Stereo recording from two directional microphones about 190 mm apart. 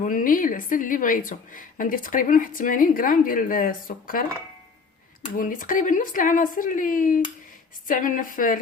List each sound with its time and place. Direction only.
0.0 s a woman's voice: 45° left (ahead or behind)
5.4 s a woman's voice: 45° left (ahead or behind)